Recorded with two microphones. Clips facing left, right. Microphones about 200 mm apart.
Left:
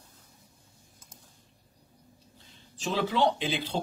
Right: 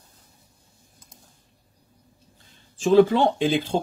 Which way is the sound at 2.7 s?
50° right (ahead or behind).